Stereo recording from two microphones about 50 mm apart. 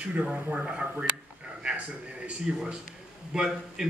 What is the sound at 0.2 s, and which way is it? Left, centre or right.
Speech, right.